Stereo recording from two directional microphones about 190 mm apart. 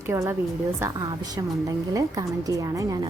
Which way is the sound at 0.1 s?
15° right (ahead or behind).